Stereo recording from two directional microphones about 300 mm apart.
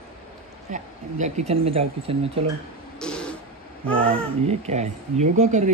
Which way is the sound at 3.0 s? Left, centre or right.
Centre.